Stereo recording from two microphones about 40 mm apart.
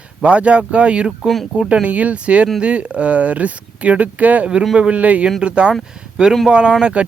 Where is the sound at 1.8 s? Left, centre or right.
Right.